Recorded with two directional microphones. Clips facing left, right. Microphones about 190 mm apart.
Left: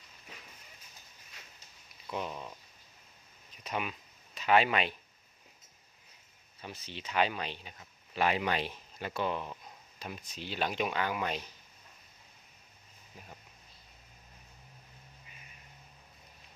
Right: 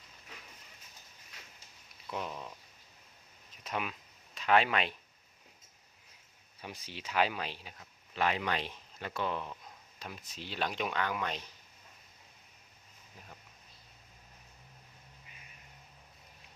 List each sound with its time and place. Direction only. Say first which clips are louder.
2.0 s speech: left 2 dB; centre (ahead or behind)
3.6 s speech: left 1 dB; centre (ahead or behind)
6.6 s speech: left 1 dB; 10° right (ahead or behind); by 11.4 s 10° left (ahead or behind)